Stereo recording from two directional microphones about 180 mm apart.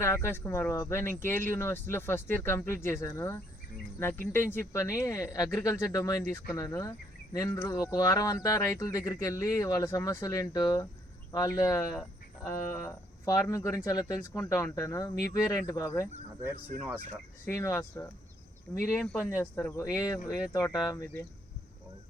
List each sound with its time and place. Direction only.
0.0 s speech: 15° left (ahead or behind)
17.5 s speech: 15° left (ahead or behind)